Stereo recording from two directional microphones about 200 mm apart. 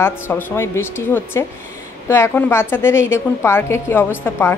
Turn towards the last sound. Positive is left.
turn(degrees=10)  # may be behind; listen again after turning